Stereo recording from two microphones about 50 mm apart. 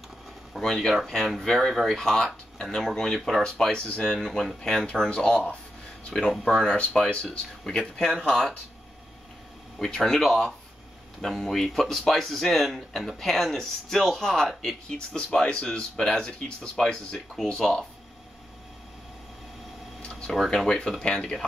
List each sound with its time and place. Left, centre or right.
0.5 s speech: centre
2.0 s speech: centre
9.8 s speech: centre
20.0 s a sound: centre
20.2 s speech: centre